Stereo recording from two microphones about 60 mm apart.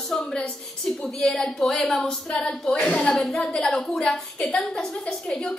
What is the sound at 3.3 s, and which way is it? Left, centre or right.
A woman's voice, centre.